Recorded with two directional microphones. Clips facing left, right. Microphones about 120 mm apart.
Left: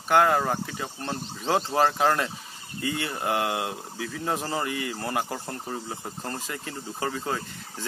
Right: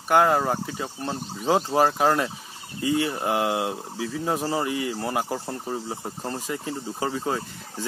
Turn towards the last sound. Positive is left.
turn(degrees=-15)  # may be behind; listen again after turning